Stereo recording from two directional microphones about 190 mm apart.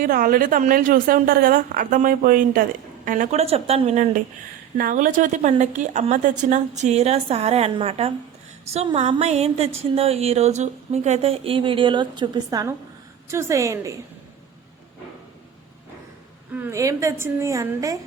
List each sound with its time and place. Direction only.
0.0 s a woman's voice: 50° right (ahead or behind); by 13.9 s 15° right (ahead or behind)
16.5 s a woman's voice: 10° right (ahead or behind)